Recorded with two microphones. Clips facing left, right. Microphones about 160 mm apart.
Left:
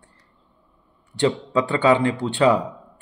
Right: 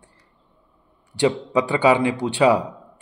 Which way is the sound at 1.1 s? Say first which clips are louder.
Right 1 dB; 10° right (ahead or behind).